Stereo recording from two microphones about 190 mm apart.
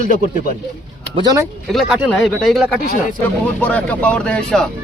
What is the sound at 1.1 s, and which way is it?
Speech, 20° right (ahead or behind).